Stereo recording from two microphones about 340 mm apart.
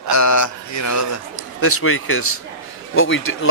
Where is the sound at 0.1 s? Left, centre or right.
Left.